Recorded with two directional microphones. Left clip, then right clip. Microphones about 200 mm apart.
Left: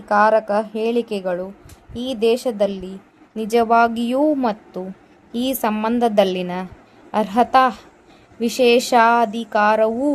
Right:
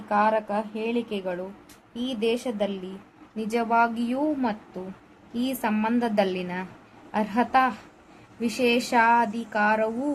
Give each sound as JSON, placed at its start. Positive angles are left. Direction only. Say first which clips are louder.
{"t": 0.1, "sound": "a woman's voice", "louder": "left 8 dB", "side_deg": 45}